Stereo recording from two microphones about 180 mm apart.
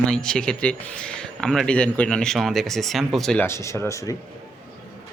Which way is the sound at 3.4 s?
15° left (ahead or behind).